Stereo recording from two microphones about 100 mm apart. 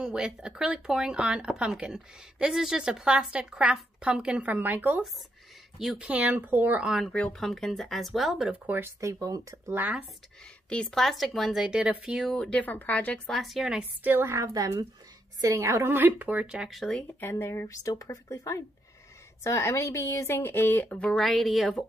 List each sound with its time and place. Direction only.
0.0 s speech: 5° right (ahead or behind)
5.8 s speech: centre (ahead or behind)
6.0 s speech: 15° right (ahead or behind)
6.9 s speech: centre (ahead or behind)
8.6 s speech: 25° right (ahead or behind)
9.8 s speech: 15° right (ahead or behind)
10.7 s speech: 10° left (ahead or behind)
12.4 s speech: 10° left (ahead or behind)
13.3 s speech: centre (ahead or behind)
14.0 s a woman's voice: 20° right (ahead or behind)
14.4 s speech: 35° right (ahead or behind); by 17.0 s centre (ahead or behind)
17.2 s speech: 25° left (ahead or behind); by 21.8 s centre (ahead or behind)